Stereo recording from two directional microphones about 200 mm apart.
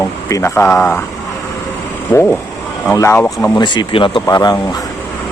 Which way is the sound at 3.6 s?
25° left (ahead or behind).